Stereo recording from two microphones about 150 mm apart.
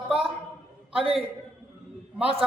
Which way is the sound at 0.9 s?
40° right (ahead or behind).